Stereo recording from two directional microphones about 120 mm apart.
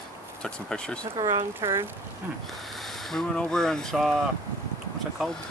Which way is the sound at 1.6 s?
20° right (ahead or behind).